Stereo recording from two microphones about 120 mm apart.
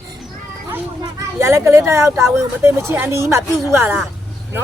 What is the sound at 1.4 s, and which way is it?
A woman's voice, 25° right (ahead or behind).